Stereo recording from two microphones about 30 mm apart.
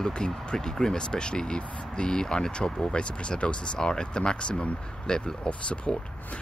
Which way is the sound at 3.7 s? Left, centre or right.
Left.